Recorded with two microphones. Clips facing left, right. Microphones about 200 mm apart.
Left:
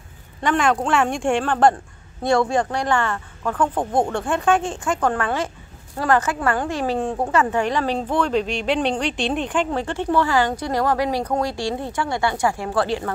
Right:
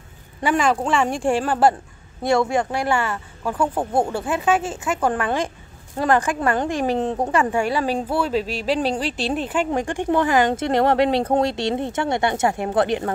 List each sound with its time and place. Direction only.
0.4 s a woman's voice: 5° right (ahead or behind)
5.1 s a woman's voice: 15° right (ahead or behind)